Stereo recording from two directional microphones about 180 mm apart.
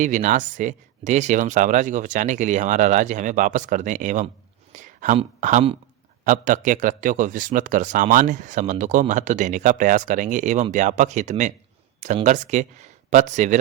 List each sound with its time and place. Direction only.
0.0 s speech: 45° right (ahead or behind)